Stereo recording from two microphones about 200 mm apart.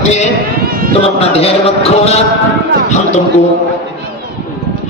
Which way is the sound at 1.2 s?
30° left (ahead or behind).